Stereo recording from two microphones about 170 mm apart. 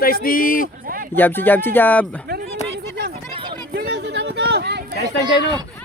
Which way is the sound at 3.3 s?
30° right (ahead or behind).